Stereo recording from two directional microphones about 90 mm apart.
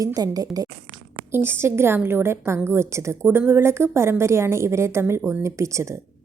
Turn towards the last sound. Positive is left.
turn(degrees=-35)  # may be behind; listen again after turning